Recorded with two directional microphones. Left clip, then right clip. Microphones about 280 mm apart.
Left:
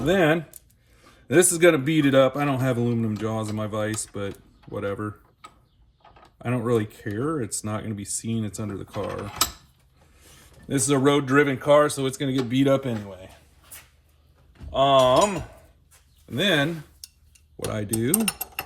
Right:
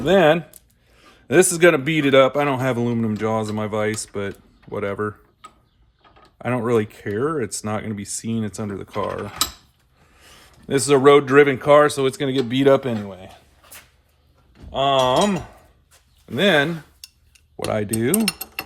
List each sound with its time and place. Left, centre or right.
0.0 s speech: centre
6.4 s speech: centre
10.7 s speech: right
14.7 s a sound: right
16.3 s speech: right
17.7 s speech: right